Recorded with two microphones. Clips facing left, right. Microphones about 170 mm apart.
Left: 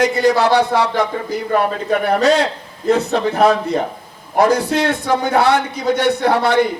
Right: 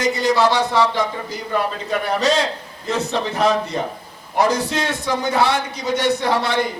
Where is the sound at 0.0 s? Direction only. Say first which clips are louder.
Left 3 dB; 55° left (ahead or behind).